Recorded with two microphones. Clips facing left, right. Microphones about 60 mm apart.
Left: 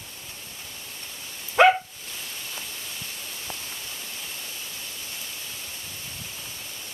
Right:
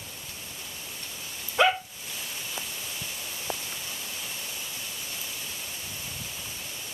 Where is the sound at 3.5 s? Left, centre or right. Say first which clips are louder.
Right 5 dB; centre.